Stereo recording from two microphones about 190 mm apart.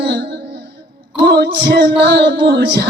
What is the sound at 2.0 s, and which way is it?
Music, 60° right (ahead or behind).